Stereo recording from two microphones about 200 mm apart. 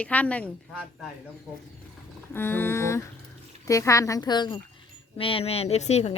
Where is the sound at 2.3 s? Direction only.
10° left (ahead or behind).